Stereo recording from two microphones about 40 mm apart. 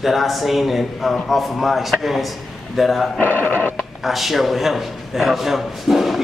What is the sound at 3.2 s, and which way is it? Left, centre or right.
Speech, left.